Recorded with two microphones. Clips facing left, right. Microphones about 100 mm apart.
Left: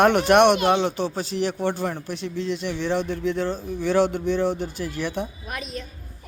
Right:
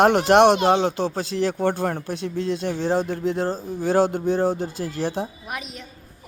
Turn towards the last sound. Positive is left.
turn(degrees=-15)  # may be behind; listen again after turning